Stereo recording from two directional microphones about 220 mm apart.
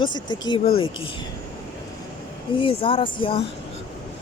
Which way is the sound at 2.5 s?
25° left (ahead or behind).